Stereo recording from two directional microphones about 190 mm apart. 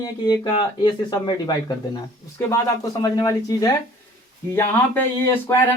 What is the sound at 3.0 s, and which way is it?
Speech, 20° left (ahead or behind).